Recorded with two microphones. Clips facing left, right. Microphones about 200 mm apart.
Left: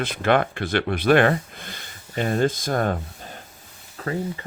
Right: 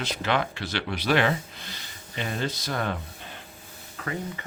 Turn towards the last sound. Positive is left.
turn(degrees=35)  # may be behind; listen again after turning